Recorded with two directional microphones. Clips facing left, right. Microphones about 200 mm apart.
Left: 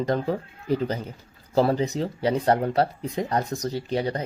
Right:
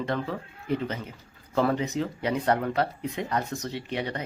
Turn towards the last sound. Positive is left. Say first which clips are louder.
# left 5 dB
turn(degrees=35)  # may be behind; listen again after turning